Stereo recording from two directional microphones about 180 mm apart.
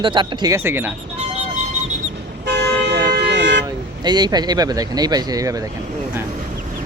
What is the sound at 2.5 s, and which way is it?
Toot, 70° right (ahead or behind).